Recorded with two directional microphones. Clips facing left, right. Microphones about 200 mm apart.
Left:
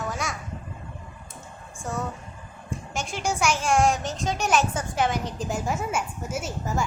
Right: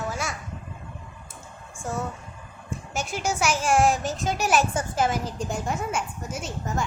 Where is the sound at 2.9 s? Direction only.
5° right (ahead or behind).